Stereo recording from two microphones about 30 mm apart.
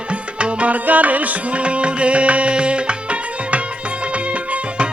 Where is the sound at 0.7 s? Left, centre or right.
Right.